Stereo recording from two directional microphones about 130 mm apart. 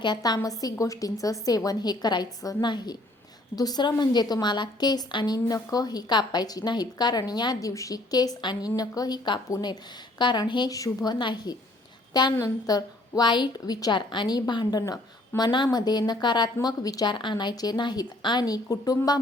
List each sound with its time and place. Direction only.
0.0 s a woman's voice: 35° left (ahead or behind)